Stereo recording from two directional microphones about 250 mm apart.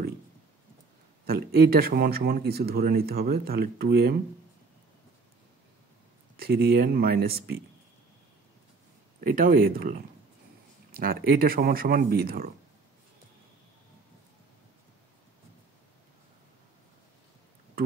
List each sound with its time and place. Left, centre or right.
1.2 s speech: right
6.3 s speech: right
9.2 s speech: right